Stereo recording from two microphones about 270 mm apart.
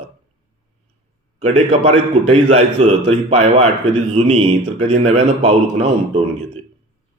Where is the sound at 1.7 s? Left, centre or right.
Right.